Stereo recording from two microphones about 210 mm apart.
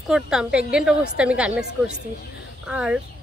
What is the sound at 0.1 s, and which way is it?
Speech, 5° right (ahead or behind).